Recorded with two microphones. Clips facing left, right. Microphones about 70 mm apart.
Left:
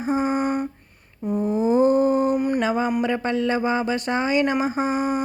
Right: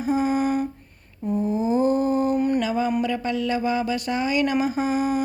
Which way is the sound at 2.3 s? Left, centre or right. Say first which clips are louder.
Even; centre.